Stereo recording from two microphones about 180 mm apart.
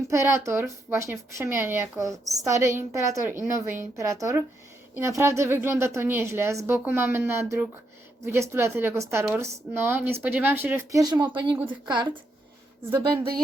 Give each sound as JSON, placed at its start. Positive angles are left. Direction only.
{"t": 0.1, "sound": "a woman's voice", "side_deg": -15}